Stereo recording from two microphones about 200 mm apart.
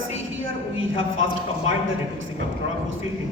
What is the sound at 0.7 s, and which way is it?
A man's voice, 75° right (ahead or behind).